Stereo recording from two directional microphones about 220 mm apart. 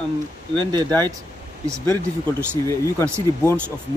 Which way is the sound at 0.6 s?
20° right (ahead or behind).